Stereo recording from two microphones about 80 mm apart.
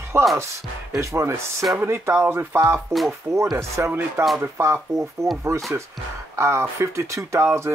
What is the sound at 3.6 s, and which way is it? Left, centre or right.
Speech, right.